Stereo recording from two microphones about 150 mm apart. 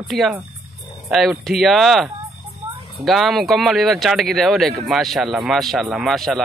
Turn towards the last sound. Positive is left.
turn(degrees=0)  # may be behind; listen again after turning